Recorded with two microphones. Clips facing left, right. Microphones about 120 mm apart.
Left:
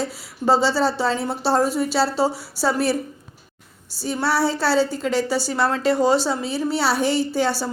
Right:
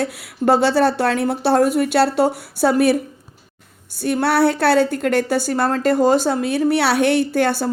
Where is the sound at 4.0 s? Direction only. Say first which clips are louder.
Right 5 dB; 60° right (ahead or behind).